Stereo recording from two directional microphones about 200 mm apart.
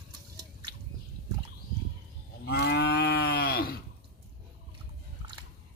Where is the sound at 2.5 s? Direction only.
55° left (ahead or behind).